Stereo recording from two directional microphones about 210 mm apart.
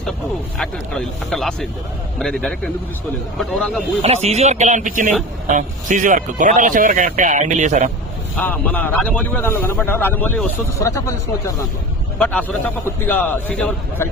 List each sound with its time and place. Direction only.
0.6 s speech: 5° left (ahead or behind)
4.0 s speech: 30° right (ahead or behind)
8.4 s a man's voice: 5° left (ahead or behind)